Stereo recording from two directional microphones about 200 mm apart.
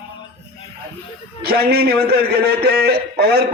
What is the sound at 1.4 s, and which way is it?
A man's voice, 50° right (ahead or behind).